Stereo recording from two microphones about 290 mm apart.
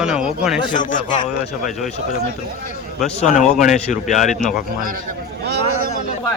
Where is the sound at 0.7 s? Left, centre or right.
Left.